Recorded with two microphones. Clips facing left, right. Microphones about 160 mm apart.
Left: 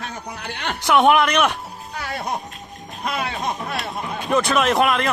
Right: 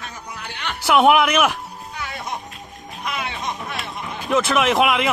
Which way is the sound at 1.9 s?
50° left (ahead or behind).